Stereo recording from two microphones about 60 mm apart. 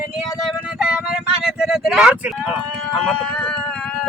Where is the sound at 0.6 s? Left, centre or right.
Centre.